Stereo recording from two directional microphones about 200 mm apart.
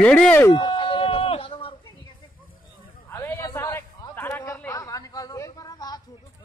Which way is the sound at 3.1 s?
10° left (ahead or behind).